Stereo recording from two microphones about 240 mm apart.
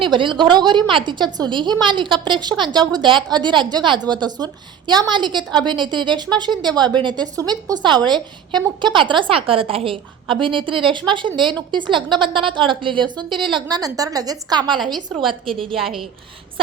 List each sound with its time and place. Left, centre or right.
0.0 s a woman's voice: centre
14.9 s a woman's voice: centre
15.3 s a woman's voice: right
15.7 s a woman's voice: centre